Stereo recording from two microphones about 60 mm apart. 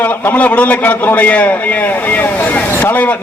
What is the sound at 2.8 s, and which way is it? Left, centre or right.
Speech, left.